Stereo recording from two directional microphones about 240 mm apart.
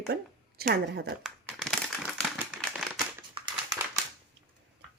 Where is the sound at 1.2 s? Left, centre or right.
Centre.